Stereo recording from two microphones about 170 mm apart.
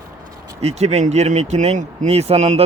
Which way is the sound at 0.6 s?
40° right (ahead or behind).